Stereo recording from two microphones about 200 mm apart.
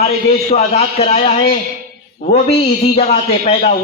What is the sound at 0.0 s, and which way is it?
A man's voice, 30° left (ahead or behind).